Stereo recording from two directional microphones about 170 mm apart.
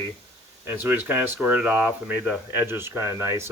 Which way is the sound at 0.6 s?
10° right (ahead or behind).